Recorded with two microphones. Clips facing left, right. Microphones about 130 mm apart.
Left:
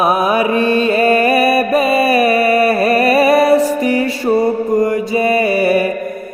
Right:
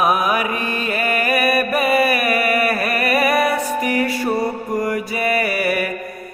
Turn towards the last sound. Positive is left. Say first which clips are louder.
# left 7 dB
turn(degrees=25)  # may be behind; listen again after turning